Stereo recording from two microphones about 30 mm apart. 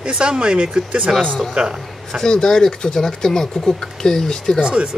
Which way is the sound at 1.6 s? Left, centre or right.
Right.